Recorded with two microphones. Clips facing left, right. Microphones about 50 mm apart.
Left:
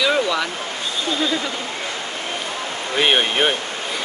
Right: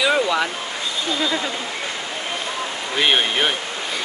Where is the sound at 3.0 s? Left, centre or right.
Centre.